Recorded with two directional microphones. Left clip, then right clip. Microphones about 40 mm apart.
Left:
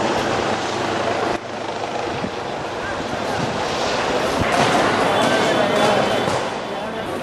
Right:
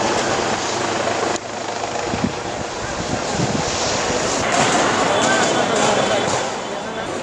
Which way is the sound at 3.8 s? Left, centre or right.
Centre.